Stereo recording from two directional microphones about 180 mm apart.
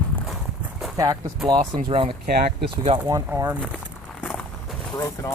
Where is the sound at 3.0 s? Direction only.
20° right (ahead or behind).